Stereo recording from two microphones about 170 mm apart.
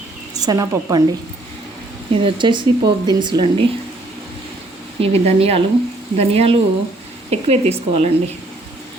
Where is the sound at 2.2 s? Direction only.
25° right (ahead or behind).